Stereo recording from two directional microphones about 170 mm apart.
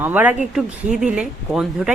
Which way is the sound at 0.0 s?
10° right (ahead or behind).